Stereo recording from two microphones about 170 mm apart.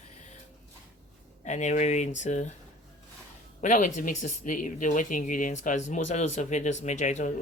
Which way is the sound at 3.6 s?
45° left (ahead or behind).